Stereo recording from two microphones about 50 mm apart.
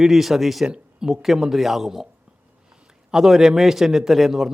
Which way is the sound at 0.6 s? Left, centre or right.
Centre.